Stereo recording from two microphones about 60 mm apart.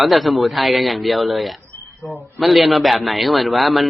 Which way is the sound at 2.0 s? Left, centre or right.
Left.